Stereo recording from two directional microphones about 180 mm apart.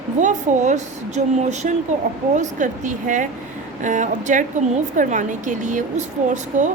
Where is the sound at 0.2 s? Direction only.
40° right (ahead or behind).